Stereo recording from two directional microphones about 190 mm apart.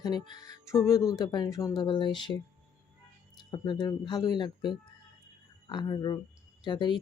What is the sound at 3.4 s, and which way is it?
Speech, 20° left (ahead or behind).